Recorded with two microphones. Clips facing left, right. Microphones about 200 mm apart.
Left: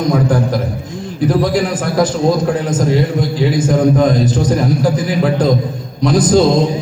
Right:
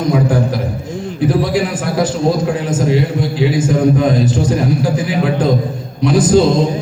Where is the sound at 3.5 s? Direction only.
40° left (ahead or behind).